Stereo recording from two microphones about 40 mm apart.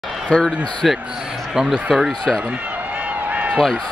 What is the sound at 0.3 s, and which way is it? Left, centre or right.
Speech, left.